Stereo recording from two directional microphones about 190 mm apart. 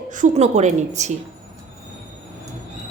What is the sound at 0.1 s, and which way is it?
A woman's voice, 40° right (ahead or behind).